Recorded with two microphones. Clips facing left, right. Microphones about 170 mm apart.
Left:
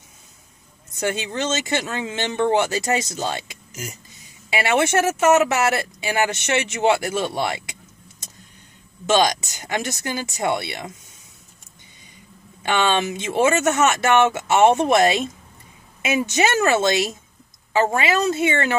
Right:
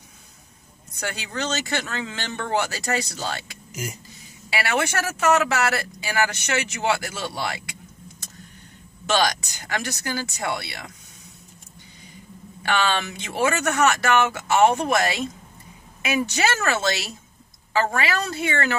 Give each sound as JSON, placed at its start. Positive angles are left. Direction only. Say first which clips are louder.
{"t": 0.9, "sound": "speech", "louder": "left 6 dB", "side_deg": 20}
{"t": 3.7, "sound": "speech", "louder": "right 2 dB", "side_deg": -10}
{"t": 4.5, "sound": "speech", "louder": "left 5 dB", "side_deg": 20}
{"t": 9.0, "sound": "speech", "louder": "left 4 dB", "side_deg": 20}
{"t": 12.6, "sound": "speech", "louder": "left 3 dB", "side_deg": 20}